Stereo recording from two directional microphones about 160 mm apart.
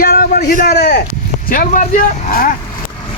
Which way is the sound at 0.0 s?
70° left (ahead or behind).